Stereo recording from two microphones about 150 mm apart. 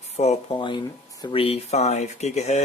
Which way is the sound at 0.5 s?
35° left (ahead or behind).